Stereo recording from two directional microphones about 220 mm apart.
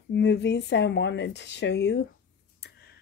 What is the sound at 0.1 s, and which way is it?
Speech, 50° left (ahead or behind).